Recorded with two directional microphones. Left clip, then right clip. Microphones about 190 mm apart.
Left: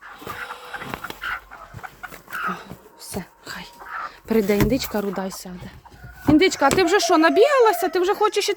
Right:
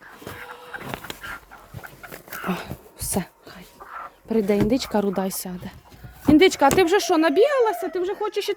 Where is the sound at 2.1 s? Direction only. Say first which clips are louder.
Left 3 dB; 35° right (ahead or behind).